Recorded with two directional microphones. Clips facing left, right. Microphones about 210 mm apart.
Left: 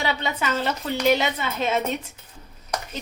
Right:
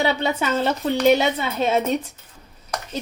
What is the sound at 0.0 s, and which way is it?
A woman's voice, 30° right (ahead or behind).